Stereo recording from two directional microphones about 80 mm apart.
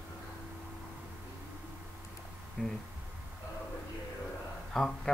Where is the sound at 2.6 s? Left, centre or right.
Centre.